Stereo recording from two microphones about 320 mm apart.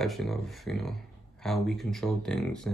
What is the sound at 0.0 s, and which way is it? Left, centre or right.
Speech, centre.